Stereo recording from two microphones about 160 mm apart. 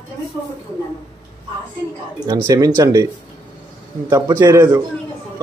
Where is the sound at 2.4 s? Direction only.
20° right (ahead or behind).